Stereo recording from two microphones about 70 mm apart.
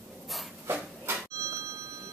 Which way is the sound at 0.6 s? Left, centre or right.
Right.